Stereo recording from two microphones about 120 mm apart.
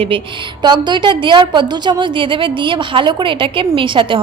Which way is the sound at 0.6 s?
40° right (ahead or behind).